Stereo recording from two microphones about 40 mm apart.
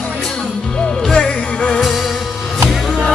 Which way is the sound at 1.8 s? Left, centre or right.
Centre.